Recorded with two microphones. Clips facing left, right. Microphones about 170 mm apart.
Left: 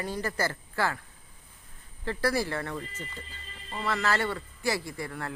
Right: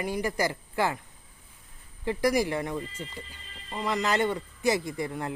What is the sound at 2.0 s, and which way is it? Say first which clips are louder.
Speech: right 3 dB; 15° right (ahead or behind).